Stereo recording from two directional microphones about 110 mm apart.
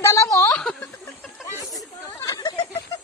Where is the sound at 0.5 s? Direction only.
5° left (ahead or behind).